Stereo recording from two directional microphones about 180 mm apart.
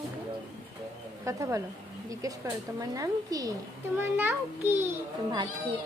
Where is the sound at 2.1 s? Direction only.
20° right (ahead or behind).